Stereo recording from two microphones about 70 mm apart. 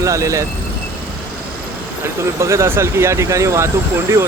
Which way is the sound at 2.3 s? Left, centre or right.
Right.